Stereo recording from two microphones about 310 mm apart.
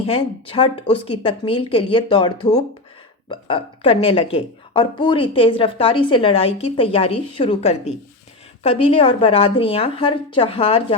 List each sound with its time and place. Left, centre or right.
0.0 s a woman's voice: centre